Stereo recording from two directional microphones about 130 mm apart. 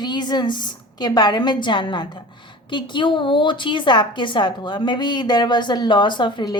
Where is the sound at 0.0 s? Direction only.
35° left (ahead or behind).